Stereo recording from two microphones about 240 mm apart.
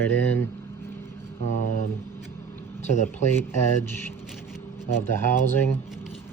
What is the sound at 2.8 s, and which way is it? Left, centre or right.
Speech, left.